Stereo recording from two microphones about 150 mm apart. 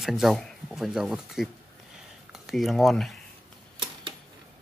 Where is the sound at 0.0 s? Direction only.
Centre (ahead or behind).